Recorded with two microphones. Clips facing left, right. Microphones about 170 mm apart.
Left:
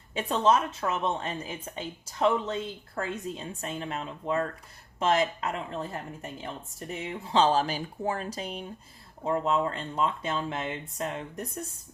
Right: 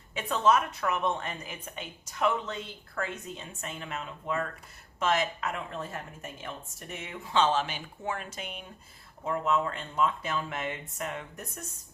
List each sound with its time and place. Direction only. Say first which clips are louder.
0.1 s speech: left 1 dB; 30° left (ahead or behind)